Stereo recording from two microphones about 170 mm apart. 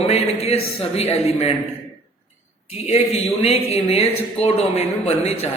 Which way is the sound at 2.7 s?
35° left (ahead or behind).